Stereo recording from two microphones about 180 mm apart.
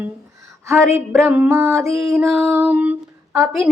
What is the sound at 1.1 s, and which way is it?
Speech, 5° right (ahead or behind).